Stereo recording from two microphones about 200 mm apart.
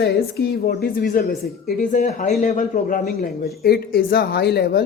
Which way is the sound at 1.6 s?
40° left (ahead or behind).